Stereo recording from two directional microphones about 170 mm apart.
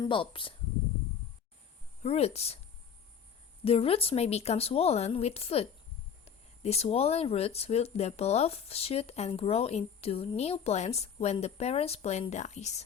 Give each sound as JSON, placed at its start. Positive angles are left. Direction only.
{"t": 0.0, "sound": "speech", "side_deg": 30}
{"t": 2.0, "sound": "speech", "side_deg": 40}
{"t": 3.6, "sound": "speech", "side_deg": 35}